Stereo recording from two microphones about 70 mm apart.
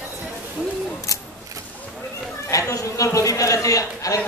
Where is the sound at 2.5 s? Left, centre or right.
Left.